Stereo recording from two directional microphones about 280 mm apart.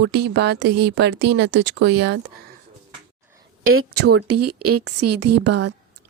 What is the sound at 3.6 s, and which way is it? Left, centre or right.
Speech, right.